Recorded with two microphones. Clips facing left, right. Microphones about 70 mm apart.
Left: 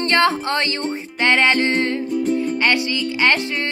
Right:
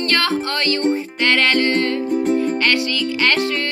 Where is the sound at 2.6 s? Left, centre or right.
Left.